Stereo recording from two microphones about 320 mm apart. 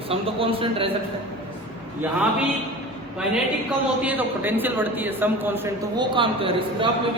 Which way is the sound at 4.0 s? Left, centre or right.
Centre.